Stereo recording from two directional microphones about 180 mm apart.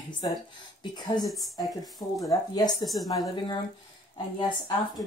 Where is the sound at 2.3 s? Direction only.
20° left (ahead or behind).